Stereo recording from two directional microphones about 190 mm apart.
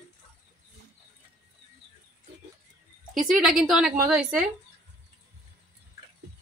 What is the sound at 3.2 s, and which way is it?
A woman's voice, centre (ahead or behind).